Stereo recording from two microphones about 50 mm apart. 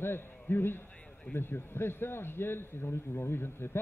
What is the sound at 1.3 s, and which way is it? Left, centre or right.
A man's voice, left.